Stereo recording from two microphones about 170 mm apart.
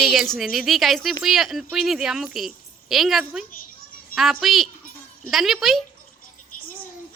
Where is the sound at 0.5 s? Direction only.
Centre (ahead or behind).